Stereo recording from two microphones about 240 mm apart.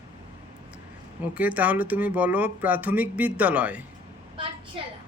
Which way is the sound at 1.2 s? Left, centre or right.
Centre.